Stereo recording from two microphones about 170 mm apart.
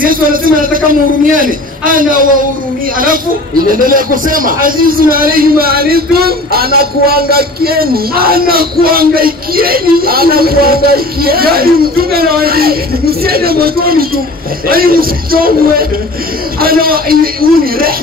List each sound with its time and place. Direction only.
0.0 s a sound: 55° right (ahead or behind)
1.3 s a man's voice: 55° right (ahead or behind)
3.8 s a man's voice: 55° right (ahead or behind)